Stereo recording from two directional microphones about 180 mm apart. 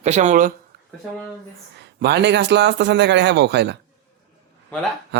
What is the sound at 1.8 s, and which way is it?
A man's voice, 70° right (ahead or behind).